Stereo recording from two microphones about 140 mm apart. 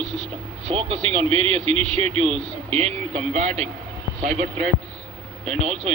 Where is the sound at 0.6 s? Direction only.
40° right (ahead or behind).